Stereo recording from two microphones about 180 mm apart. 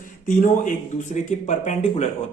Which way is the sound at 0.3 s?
45° left (ahead or behind).